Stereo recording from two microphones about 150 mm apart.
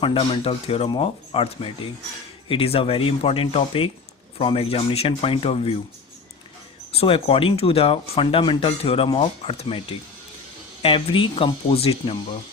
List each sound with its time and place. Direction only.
0.0 s speech: 35° left (ahead or behind)
6.9 s speech: 40° left (ahead or behind)
10.8 s speech: 35° left (ahead or behind)